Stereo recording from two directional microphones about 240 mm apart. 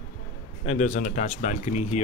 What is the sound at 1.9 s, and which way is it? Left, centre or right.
Speech, left.